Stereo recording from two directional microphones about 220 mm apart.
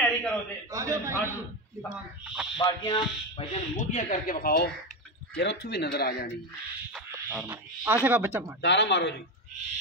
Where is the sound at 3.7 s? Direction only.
35° left (ahead or behind).